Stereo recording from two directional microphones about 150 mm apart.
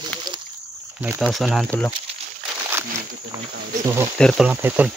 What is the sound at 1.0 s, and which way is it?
Speech, 10° right (ahead or behind).